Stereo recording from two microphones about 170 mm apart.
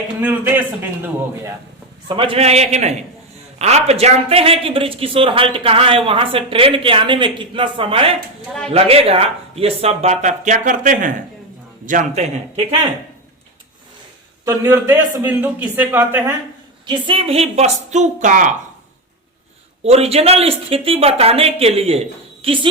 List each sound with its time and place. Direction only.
0.2 s a man's voice: 10° right (ahead or behind)
2.0 s a man's voice: 30° right (ahead or behind)
14.4 s a man's voice: 20° right (ahead or behind)
16.8 s speech: 30° right (ahead or behind); by 18.5 s 50° right (ahead or behind)
19.8 s speech: 35° right (ahead or behind)